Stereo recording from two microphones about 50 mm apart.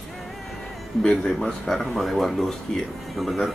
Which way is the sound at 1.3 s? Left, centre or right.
Centre.